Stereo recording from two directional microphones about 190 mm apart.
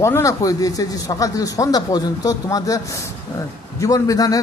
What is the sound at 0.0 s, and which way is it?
A man's voice, 15° left (ahead or behind).